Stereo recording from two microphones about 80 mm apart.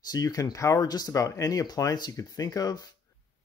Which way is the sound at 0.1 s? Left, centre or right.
Left.